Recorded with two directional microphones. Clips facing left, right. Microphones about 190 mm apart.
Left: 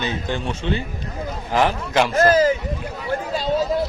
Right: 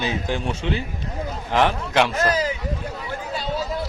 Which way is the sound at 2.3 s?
40° left (ahead or behind).